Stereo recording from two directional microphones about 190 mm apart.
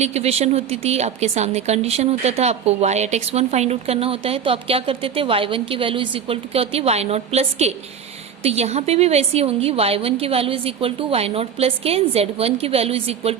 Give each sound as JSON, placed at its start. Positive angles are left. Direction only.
{"t": 0.0, "sound": "a woman's voice", "side_deg": -35}